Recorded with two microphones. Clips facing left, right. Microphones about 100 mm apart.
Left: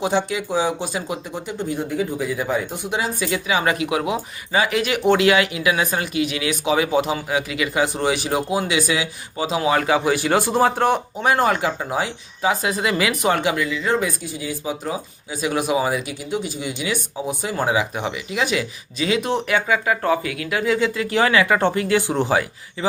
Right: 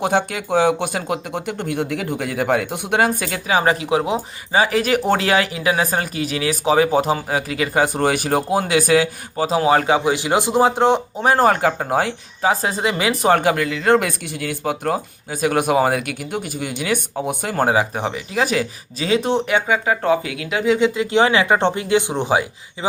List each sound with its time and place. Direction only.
0.0 s speech: 55° right (ahead or behind); by 11.0 s 20° right (ahead or behind)
11.2 s speech: 35° right (ahead or behind); by 22.9 s 20° right (ahead or behind)